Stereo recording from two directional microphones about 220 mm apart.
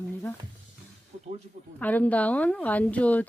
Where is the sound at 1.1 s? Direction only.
35° right (ahead or behind).